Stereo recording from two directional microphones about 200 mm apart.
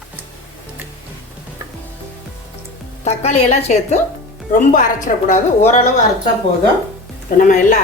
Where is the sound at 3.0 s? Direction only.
30° left (ahead or behind).